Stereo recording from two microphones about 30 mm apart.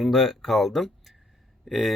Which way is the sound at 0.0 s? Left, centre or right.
Centre.